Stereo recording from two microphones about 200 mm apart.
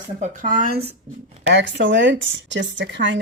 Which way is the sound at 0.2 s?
40° right (ahead or behind).